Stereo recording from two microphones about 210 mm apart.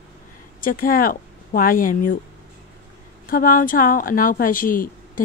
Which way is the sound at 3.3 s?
40° left (ahead or behind).